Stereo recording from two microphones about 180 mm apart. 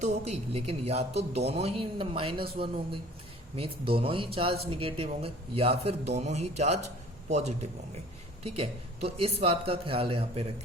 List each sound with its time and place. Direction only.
0.0 s speech: 40° right (ahead or behind)